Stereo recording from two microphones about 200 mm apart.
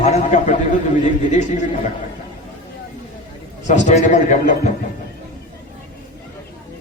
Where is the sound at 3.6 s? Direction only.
35° left (ahead or behind).